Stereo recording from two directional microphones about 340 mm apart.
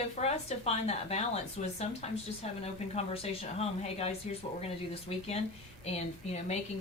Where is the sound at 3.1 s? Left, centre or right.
Centre.